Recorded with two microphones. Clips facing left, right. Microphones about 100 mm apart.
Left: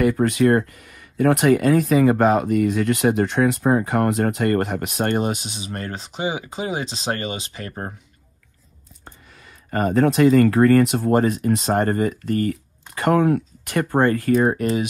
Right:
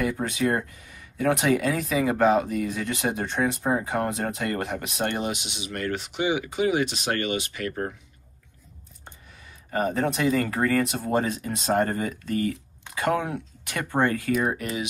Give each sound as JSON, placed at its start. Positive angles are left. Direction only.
{"t": 0.0, "sound": "speech", "side_deg": 70}
{"t": 9.7, "sound": "speech", "side_deg": 65}